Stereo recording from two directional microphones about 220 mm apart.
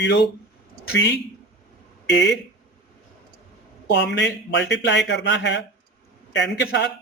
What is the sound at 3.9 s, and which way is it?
Speech, 50° left (ahead or behind).